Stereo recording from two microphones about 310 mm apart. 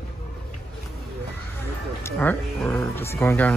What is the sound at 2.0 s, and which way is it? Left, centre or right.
Speech, centre.